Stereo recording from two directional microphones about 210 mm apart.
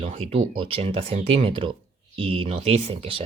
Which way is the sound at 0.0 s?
25° right (ahead or behind).